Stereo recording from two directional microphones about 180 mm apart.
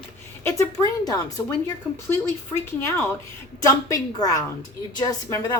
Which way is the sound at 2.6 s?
10° left (ahead or behind).